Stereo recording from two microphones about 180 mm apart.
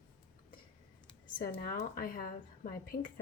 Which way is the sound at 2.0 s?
50° left (ahead or behind).